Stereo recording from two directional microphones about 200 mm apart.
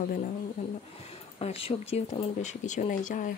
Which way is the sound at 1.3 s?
30° left (ahead or behind).